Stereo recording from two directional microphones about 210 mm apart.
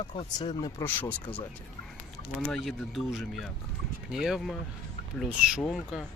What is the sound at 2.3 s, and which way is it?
Speech, centre (ahead or behind).